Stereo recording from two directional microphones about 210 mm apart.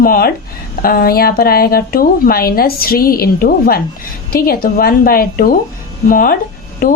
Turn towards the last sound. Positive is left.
turn(degrees=40)  # may be behind; listen again after turning